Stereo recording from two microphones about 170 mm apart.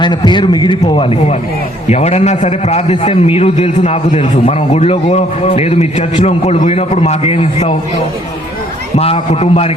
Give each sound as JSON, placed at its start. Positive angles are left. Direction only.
{"t": 0.0, "sound": "a man's voice", "side_deg": 25}
{"t": 9.0, "sound": "a man's voice", "side_deg": 35}